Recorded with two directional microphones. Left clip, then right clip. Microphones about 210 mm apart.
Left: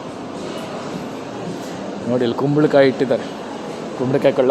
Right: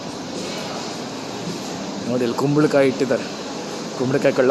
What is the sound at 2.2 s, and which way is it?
Speech, centre (ahead or behind).